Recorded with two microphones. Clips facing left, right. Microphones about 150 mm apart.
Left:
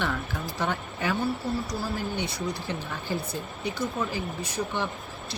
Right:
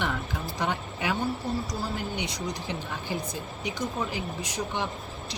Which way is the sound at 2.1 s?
15° right (ahead or behind).